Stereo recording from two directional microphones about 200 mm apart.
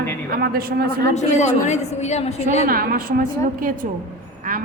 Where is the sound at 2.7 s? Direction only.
45° right (ahead or behind).